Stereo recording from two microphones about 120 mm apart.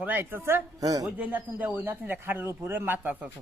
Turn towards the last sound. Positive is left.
turn(degrees=-15)  # may be behind; listen again after turning